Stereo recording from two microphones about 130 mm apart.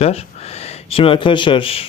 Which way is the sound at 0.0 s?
50° left (ahead or behind).